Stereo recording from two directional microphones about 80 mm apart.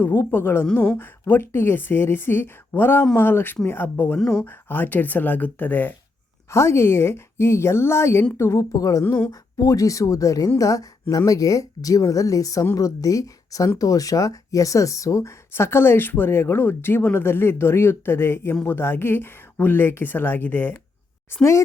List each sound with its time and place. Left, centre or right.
0.0 s speech: left
4.2 s speech: centre
4.4 s speech: left
6.5 s speech: left
8.7 s speech: left